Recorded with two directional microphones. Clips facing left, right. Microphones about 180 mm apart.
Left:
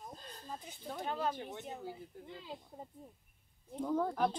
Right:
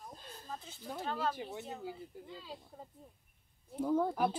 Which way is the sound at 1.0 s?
15° left (ahead or behind).